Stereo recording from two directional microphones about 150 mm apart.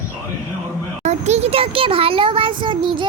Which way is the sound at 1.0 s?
50° right (ahead or behind).